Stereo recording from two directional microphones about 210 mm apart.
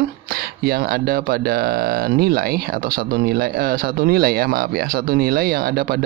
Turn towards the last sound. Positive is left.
turn(degrees=-45)  # may be behind; listen again after turning